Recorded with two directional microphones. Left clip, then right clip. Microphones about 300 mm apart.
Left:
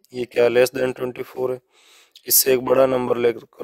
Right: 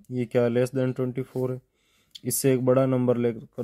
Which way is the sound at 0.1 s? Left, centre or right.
Left.